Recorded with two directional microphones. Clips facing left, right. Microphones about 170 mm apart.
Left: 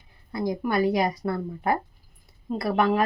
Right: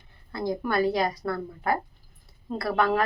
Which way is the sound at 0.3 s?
15° left (ahead or behind).